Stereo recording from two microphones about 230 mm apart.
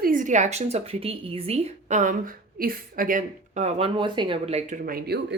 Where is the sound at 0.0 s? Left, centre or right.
Right.